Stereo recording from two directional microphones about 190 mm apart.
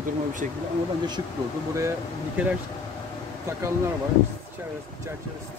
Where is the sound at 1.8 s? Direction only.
10° right (ahead or behind).